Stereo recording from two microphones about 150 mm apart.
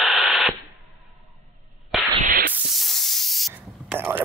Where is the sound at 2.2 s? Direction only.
75° right (ahead or behind).